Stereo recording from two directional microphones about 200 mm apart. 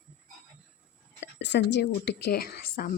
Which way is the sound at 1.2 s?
60° left (ahead or behind).